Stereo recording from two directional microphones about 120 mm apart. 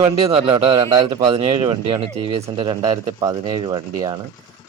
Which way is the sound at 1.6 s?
45° right (ahead or behind).